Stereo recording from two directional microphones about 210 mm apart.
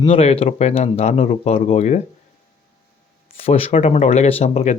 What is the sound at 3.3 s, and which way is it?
Speech, 30° left (ahead or behind).